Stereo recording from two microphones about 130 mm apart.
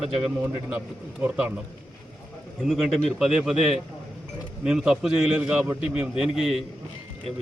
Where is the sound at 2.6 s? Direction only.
Centre (ahead or behind).